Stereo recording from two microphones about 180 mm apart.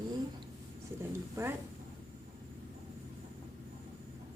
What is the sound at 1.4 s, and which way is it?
Speech, 15° right (ahead or behind).